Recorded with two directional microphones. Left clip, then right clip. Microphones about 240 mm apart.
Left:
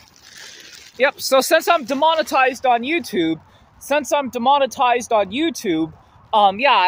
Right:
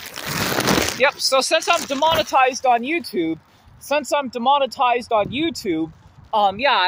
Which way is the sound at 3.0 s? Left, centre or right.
Centre.